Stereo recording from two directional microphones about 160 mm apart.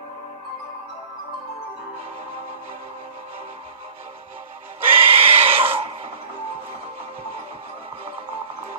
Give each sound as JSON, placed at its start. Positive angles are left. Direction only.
{"t": 4.9, "sound": "neigh", "side_deg": -35}